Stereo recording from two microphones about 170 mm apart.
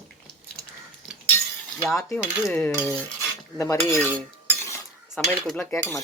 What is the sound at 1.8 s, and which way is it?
Cutlery, centre (ahead or behind).